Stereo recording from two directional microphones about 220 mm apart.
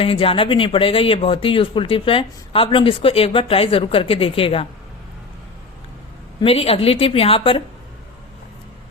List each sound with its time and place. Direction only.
0.0 s speech: 25° left (ahead or behind)
6.4 s speech: 25° left (ahead or behind)